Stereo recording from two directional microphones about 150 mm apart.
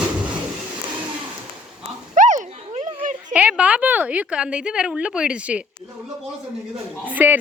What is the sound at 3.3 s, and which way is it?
A woman's voice, 10° right (ahead or behind).